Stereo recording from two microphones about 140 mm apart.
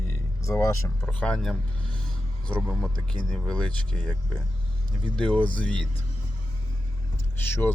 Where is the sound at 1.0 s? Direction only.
10° left (ahead or behind).